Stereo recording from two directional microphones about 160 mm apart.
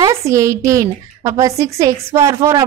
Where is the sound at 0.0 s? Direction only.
20° right (ahead or behind).